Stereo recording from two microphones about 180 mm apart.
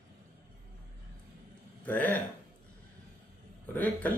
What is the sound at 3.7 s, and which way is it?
Speech, 10° left (ahead or behind).